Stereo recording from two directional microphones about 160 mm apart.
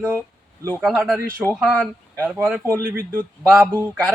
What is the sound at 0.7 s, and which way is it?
Speech, centre (ahead or behind).